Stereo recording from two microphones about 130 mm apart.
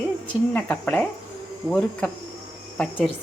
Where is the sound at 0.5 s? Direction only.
10° left (ahead or behind).